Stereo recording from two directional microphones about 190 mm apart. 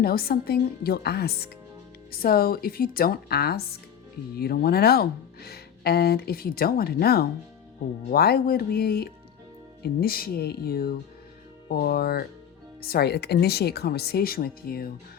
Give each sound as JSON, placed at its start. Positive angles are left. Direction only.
{"t": 0.0, "sound": "speech", "side_deg": 55}